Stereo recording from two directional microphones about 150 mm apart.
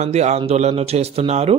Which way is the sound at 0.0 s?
50° right (ahead or behind).